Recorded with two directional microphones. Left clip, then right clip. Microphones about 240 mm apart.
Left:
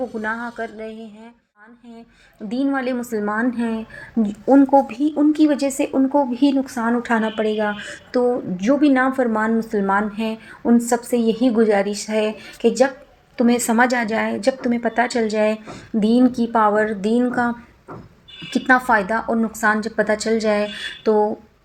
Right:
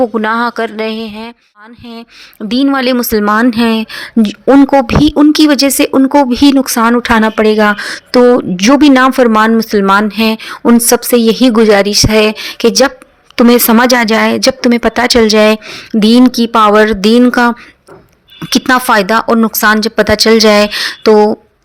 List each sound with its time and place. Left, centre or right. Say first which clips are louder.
0.0 s speech: right 14 dB; right
2.5 s speech: right 11 dB; right
18.5 s speech: right 8 dB; right